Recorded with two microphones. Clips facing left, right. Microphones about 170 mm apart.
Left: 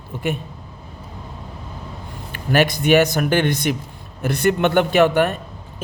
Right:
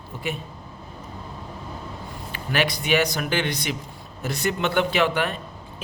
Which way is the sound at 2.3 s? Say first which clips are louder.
Left 7 dB; 50° left (ahead or behind).